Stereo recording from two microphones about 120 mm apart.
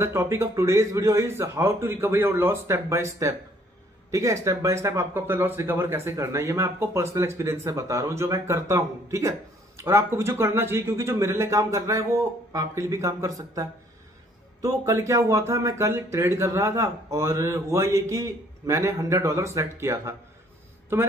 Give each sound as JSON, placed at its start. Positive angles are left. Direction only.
{"t": 0.0, "sound": "speech", "side_deg": -20}